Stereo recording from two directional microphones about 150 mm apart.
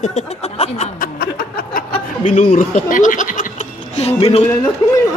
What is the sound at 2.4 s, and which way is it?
Speech, 60° left (ahead or behind).